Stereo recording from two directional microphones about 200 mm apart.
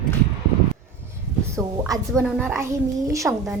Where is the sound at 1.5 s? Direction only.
15° right (ahead or behind).